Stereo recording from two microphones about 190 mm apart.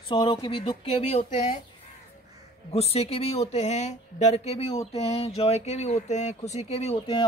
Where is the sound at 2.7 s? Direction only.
35° left (ahead or behind).